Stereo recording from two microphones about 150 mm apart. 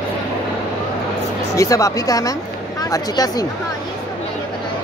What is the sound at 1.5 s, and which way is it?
Speech, 20° left (ahead or behind).